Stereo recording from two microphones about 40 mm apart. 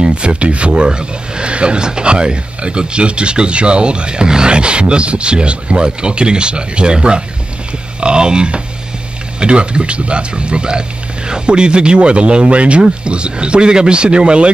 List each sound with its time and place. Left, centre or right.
0.0 s speech: right